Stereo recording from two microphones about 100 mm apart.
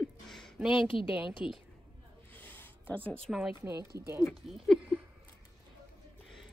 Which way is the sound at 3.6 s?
30° right (ahead or behind).